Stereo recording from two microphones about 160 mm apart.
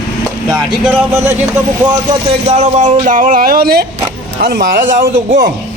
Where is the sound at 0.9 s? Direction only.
15° right (ahead or behind).